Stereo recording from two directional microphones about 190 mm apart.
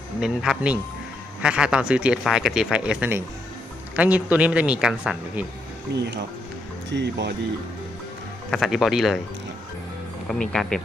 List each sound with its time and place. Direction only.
0.2 s speech: 5° right (ahead or behind)
5.9 s speech: 65° right (ahead or behind)
8.4 s speech: centre (ahead or behind)
10.5 s speech: 5° left (ahead or behind)